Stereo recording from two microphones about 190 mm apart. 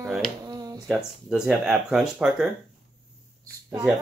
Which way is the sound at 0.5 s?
20° right (ahead or behind).